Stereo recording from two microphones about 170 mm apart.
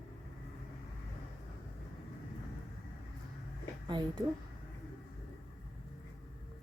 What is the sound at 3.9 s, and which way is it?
Speech, 25° right (ahead or behind).